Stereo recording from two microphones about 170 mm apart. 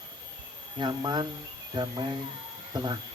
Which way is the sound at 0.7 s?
25° right (ahead or behind).